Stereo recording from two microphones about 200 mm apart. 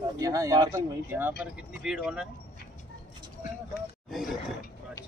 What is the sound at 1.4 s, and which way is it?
Speech, 5° right (ahead or behind).